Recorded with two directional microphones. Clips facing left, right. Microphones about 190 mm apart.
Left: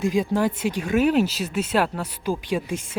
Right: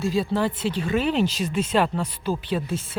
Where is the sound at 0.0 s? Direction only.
15° left (ahead or behind).